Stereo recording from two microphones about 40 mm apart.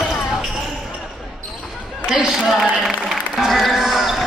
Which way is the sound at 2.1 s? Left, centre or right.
Centre.